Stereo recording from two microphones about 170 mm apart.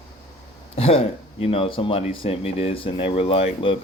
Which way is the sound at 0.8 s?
35° left (ahead or behind).